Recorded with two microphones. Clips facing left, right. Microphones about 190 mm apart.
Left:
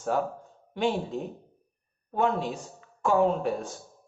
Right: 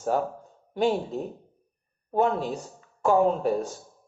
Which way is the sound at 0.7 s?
40° right (ahead or behind).